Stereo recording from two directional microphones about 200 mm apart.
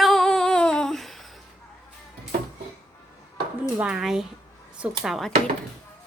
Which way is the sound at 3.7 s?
5° right (ahead or behind).